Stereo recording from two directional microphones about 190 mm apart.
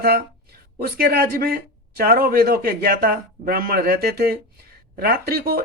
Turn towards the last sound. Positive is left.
turn(degrees=-55)  # may be behind; listen again after turning